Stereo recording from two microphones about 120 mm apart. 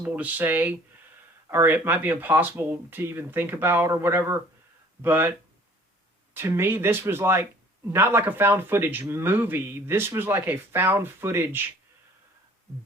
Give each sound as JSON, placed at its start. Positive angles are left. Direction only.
{"t": 0.0, "sound": "speech", "side_deg": -15}
{"t": 6.3, "sound": "speech", "side_deg": -20}